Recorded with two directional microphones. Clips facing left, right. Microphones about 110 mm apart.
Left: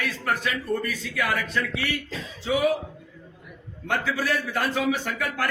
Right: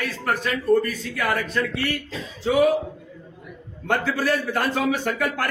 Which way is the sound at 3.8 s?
50° right (ahead or behind).